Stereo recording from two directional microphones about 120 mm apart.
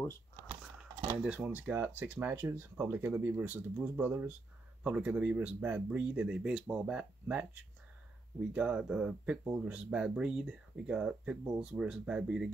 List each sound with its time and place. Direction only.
1.2 s speech: 10° right (ahead or behind)
8.5 s speech: 5° right (ahead or behind)